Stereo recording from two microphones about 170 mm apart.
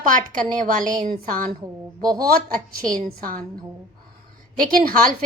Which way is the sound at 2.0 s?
20° right (ahead or behind).